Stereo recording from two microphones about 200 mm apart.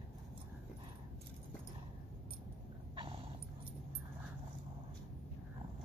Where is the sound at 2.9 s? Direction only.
25° right (ahead or behind).